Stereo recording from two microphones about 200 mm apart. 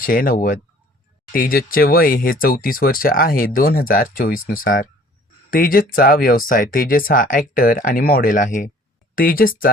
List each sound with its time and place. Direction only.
0.0 s speech: 45° left (ahead or behind)